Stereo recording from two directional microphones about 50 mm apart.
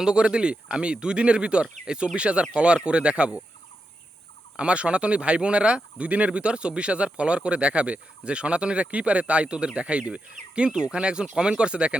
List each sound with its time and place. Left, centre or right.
0.0 s speech: centre
4.5 s speech: right